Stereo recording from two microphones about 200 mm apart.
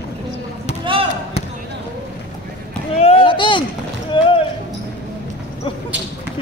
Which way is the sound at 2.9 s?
30° left (ahead or behind).